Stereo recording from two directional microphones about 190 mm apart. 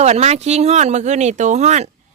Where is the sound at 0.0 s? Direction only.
35° right (ahead or behind).